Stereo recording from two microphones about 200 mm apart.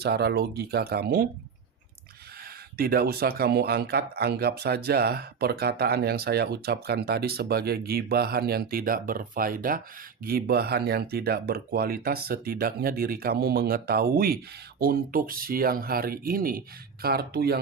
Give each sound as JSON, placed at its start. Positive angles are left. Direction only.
{"t": 0.0, "sound": "speech", "side_deg": -55}
{"t": 2.7, "sound": "speech", "side_deg": -50}